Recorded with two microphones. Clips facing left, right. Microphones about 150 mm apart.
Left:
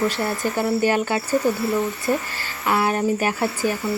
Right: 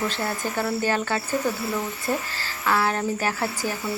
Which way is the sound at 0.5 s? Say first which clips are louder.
Left 5 dB; 15° left (ahead or behind).